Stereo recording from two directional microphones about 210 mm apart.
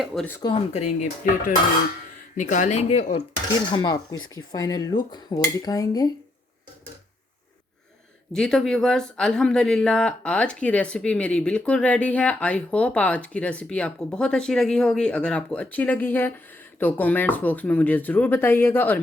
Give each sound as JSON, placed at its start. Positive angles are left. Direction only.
{"t": 0.0, "sound": "speech", "side_deg": 0}
{"t": 0.3, "sound": "speech", "side_deg": 25}
{"t": 3.7, "sound": "speech", "side_deg": 20}
{"t": 8.3, "sound": "speech", "side_deg": 0}